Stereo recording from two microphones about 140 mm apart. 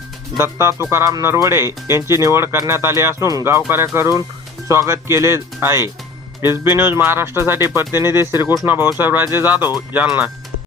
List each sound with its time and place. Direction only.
0.3 s speech: 20° right (ahead or behind)